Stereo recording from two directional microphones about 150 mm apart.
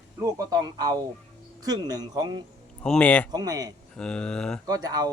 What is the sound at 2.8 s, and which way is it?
Speech, 5° left (ahead or behind).